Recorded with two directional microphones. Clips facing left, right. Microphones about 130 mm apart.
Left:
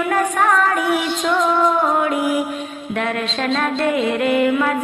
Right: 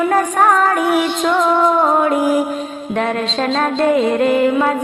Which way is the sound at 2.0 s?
35° right (ahead or behind).